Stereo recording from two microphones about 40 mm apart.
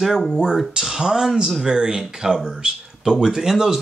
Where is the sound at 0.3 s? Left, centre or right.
Centre.